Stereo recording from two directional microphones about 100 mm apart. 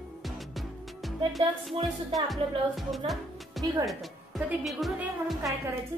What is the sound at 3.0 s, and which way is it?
Speech, 65° right (ahead or behind).